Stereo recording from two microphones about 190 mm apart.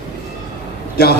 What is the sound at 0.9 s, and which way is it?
Speech, 55° left (ahead or behind).